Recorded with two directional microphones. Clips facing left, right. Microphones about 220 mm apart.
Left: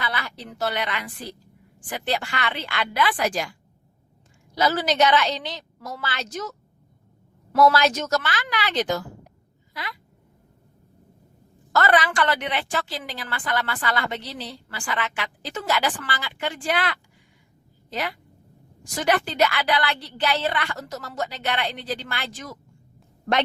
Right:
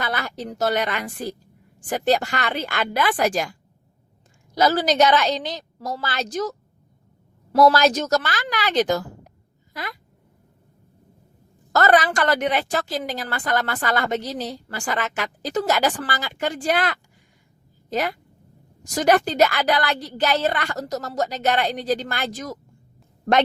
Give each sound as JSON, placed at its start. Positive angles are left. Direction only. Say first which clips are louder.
{"t": 0.0, "sound": "a woman's voice", "louder": "right 4 dB", "side_deg": -45}
{"t": 11.7, "sound": "a woman's voice", "louder": "right 3 dB", "side_deg": -40}